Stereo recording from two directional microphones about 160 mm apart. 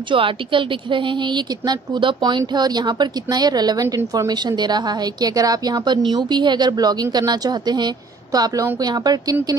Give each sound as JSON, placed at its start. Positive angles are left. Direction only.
{"t": 0.1, "sound": "a woman's voice", "side_deg": -30}